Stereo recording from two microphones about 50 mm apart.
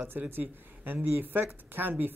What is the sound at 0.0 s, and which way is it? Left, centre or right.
Speech, right.